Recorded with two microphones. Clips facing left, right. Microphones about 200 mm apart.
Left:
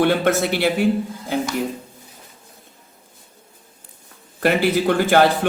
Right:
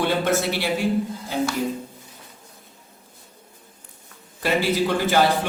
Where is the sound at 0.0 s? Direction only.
60° left (ahead or behind).